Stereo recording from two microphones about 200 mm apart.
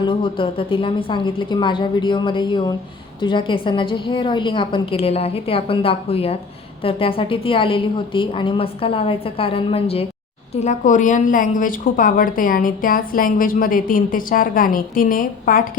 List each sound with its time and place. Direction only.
0.0 s a woman's voice: 25° left (ahead or behind); by 15.6 s 45° left (ahead or behind)